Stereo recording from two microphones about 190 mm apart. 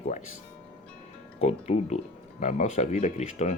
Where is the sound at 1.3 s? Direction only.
35° left (ahead or behind).